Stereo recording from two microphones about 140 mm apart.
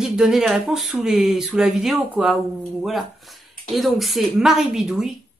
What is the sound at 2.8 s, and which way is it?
Speech, centre (ahead or behind).